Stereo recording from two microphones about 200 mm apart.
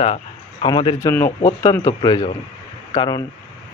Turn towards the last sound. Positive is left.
turn(degrees=20)  # may be behind; listen again after turning